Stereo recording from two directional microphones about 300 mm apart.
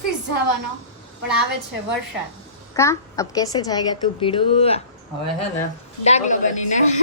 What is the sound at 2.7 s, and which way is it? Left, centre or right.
A woman's voice, centre.